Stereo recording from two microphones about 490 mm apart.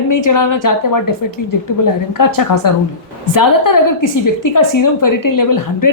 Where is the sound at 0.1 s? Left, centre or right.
Left.